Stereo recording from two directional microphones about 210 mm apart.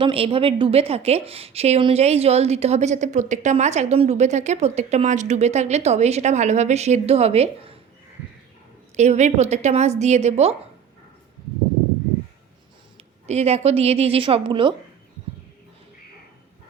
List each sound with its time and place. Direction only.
0.0 s a woman's voice: 25° right (ahead or behind)
9.0 s a woman's voice: 35° right (ahead or behind)
13.2 s a woman's voice: 30° right (ahead or behind)